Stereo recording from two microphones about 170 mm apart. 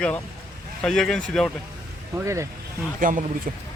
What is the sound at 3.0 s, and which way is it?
Speech, 50° right (ahead or behind).